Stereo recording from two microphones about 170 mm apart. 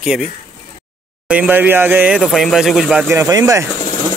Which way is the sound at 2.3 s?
Centre (ahead or behind).